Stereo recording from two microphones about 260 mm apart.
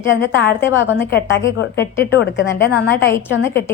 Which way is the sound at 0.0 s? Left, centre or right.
Left.